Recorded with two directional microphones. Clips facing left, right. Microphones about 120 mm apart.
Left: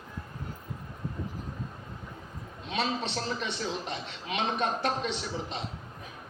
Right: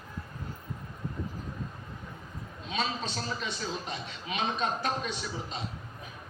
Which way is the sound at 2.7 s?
70° left (ahead or behind).